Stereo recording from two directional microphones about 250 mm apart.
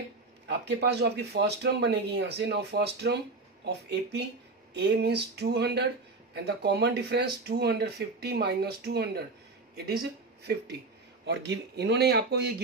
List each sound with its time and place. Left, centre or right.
0.5 s speech: right
4.7 s speech: right